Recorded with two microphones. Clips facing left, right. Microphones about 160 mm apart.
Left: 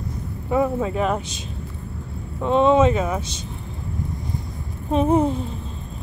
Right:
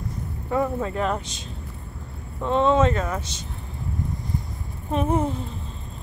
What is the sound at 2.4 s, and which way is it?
Speech, 15° left (ahead or behind).